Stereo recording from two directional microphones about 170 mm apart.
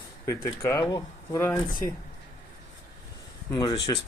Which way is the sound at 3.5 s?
25° left (ahead or behind).